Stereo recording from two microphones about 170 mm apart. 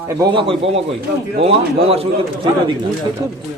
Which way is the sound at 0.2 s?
30° right (ahead or behind).